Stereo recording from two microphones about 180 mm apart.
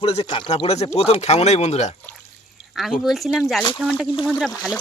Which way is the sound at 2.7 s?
Centre (ahead or behind).